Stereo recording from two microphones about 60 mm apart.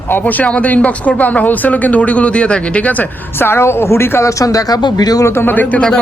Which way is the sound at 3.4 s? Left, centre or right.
Left.